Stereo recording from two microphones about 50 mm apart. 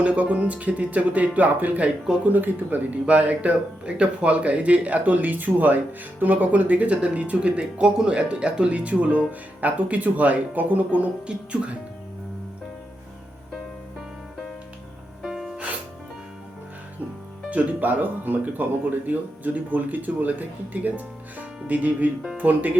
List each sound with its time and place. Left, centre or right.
0.0 s speech: right
11.3 s speech: right
15.2 s music: centre
17.5 s speech: right